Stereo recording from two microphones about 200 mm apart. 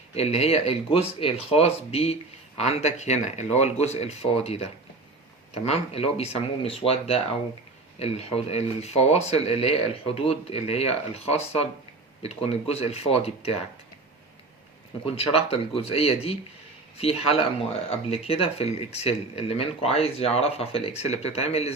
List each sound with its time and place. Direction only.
0.1 s speech: 30° left (ahead or behind)
7.9 s speech: 30° left (ahead or behind)
15.0 s speech: 30° left (ahead or behind)